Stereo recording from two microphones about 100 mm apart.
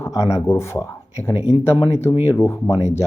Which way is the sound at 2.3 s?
30° left (ahead or behind).